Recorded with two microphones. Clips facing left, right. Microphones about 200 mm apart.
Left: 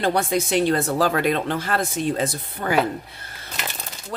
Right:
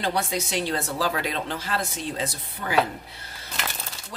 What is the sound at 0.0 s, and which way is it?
Speech, 55° left (ahead or behind).